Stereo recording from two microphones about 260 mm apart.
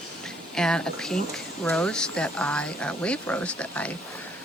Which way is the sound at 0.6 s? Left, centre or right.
Centre.